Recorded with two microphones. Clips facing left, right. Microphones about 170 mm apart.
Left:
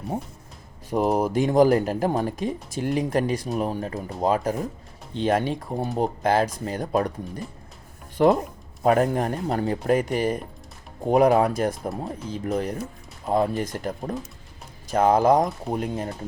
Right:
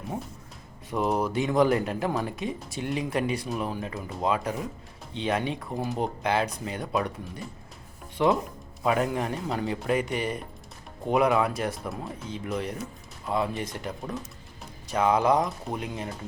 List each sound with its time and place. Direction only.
0.9 s speech: 40° left (ahead or behind)
8.2 s speech: 45° left (ahead or behind)